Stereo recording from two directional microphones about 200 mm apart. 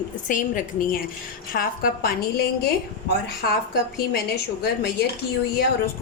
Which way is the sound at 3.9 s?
50° left (ahead or behind).